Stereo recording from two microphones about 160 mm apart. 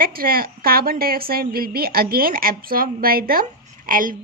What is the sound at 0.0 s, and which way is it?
A woman's voice, 65° right (ahead or behind).